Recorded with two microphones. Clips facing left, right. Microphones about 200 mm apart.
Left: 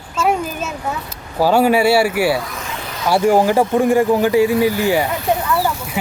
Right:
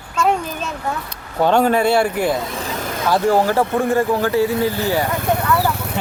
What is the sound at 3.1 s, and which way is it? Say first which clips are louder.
Speech: left 3 dB; 15° left (ahead or behind).